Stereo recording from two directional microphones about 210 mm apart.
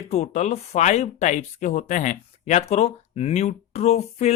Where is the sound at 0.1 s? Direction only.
30° left (ahead or behind).